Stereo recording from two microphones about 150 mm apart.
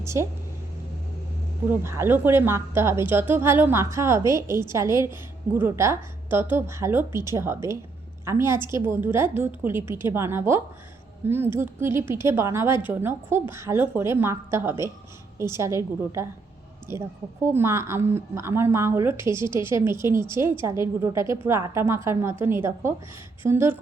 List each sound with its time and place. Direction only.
0.0 s speech: 20° right (ahead or behind)
1.7 s a woman's voice: 15° right (ahead or behind)
17.4 s a woman's voice: 15° right (ahead or behind)